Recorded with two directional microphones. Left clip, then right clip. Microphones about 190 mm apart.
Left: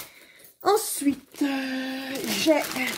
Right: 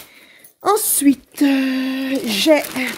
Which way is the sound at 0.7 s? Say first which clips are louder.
Right 7 dB; 55° right (ahead or behind).